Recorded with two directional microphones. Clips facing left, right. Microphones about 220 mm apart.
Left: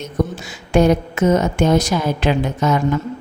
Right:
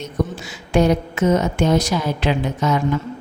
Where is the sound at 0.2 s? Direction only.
50° left (ahead or behind).